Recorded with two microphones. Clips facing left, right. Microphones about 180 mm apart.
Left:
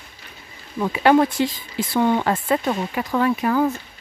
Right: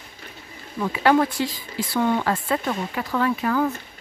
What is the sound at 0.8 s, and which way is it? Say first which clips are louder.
Speech: left 3 dB; 20° left (ahead or behind).